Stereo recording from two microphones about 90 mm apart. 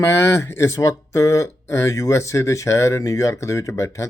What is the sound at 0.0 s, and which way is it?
Speech, 30° left (ahead or behind).